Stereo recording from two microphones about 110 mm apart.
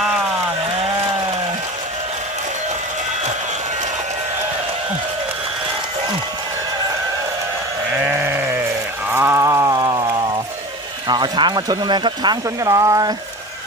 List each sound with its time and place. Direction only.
8.0 s sheep: 20° right (ahead or behind)
9.4 s a sound: 30° right (ahead or behind)
11.1 s speech: 40° right (ahead or behind)